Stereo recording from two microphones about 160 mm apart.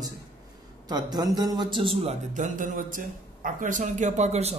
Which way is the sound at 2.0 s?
50° right (ahead or behind).